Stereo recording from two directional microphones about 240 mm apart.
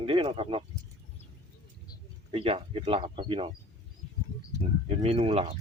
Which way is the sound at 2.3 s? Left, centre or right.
Right.